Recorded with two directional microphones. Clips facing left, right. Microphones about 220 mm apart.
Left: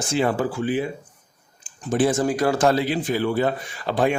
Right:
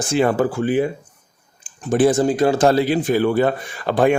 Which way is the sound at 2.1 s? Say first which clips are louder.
Right 4 dB; 25° right (ahead or behind).